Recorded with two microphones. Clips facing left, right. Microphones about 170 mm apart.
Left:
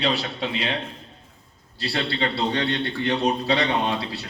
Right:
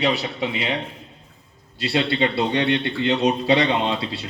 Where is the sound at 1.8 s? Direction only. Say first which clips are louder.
Right 5 dB; 20° right (ahead or behind).